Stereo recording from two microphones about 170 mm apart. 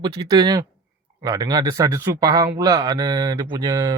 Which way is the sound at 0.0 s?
25° right (ahead or behind).